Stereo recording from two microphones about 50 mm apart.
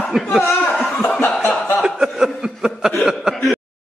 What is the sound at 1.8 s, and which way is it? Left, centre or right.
Chuckle, centre.